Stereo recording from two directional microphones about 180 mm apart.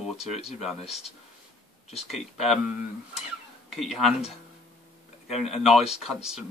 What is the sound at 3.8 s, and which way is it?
Speech, centre (ahead or behind).